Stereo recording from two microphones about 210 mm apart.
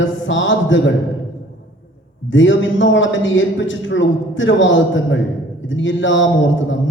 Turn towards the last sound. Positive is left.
turn(degrees=60)  # may be behind; listen again after turning